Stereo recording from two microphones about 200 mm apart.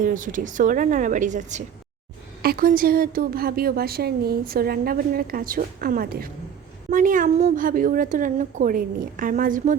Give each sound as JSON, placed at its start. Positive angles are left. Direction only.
{"t": 0.0, "sound": "a woman's voice", "side_deg": -40}
{"t": 2.4, "sound": "a woman's voice", "side_deg": -45}